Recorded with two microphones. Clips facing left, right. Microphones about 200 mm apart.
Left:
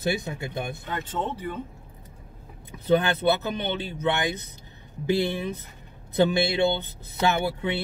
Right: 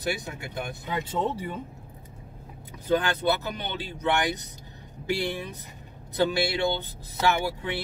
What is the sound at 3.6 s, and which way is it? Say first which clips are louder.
Speech: left 5 dB; 20° left (ahead or behind).